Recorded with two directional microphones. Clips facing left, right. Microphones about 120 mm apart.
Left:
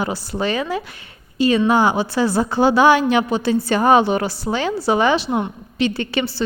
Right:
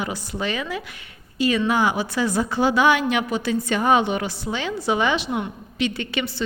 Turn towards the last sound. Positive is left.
turn(degrees=35)  # may be behind; listen again after turning